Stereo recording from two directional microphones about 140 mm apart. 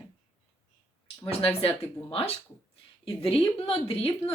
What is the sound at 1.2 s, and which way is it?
A woman's voice, 40° left (ahead or behind).